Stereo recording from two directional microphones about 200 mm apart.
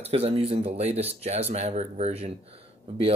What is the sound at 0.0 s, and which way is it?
Speech, 30° right (ahead or behind).